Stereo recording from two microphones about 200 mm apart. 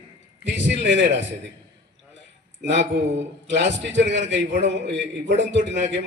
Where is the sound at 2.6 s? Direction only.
60° right (ahead or behind).